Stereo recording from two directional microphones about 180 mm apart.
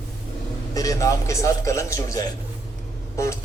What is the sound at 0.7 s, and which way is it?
Speech, 20° left (ahead or behind).